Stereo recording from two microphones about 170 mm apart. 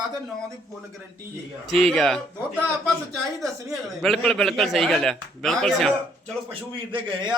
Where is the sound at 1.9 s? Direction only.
5° left (ahead or behind).